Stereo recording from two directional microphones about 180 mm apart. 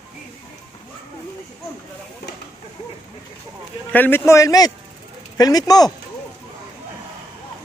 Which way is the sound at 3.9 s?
10° left (ahead or behind).